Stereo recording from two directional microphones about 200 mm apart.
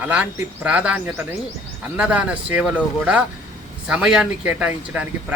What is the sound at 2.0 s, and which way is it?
Speech, 5° right (ahead or behind).